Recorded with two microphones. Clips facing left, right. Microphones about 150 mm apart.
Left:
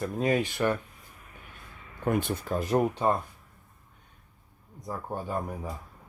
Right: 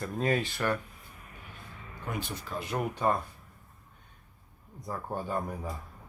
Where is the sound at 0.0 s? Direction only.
15° left (ahead or behind).